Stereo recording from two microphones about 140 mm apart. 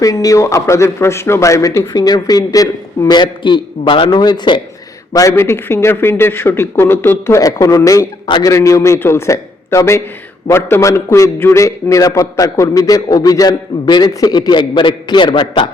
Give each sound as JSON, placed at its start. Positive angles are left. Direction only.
{"t": 0.0, "sound": "a man's voice", "side_deg": 25}
{"t": 5.1, "sound": "a man's voice", "side_deg": 20}